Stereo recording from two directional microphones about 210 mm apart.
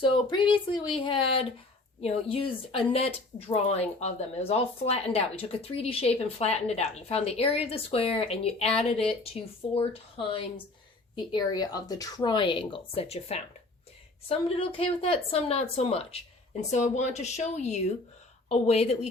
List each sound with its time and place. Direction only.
0.0 s speech: 25° left (ahead or behind)